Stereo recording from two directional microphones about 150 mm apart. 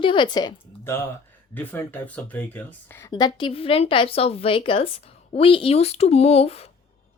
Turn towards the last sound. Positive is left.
turn(degrees=40)  # may be behind; listen again after turning